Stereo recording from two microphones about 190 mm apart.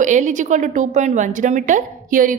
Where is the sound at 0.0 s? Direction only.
40° right (ahead or behind).